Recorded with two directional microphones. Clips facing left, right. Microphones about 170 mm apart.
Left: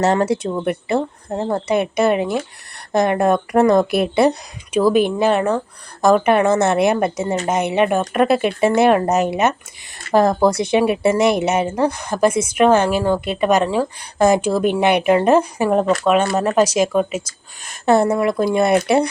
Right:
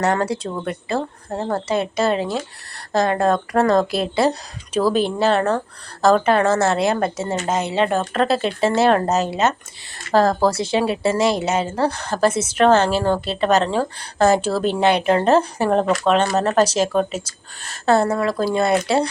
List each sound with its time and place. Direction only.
0.0 s a woman's voice: 25° left (ahead or behind)